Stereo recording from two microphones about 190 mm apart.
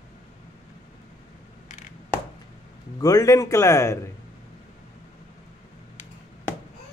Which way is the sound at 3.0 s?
20° left (ahead or behind).